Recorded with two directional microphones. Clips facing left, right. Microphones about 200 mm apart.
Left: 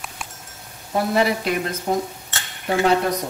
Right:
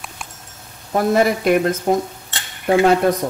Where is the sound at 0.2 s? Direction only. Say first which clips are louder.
Left 1 dB; centre (ahead or behind).